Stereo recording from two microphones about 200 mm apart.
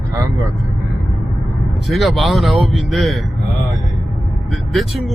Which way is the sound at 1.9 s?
Centre (ahead or behind).